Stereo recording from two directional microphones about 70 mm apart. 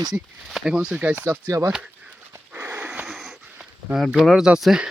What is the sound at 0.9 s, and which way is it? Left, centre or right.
Speech, right.